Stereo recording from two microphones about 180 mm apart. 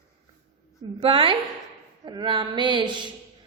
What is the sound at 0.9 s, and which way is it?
A woman's voice, 30° right (ahead or behind).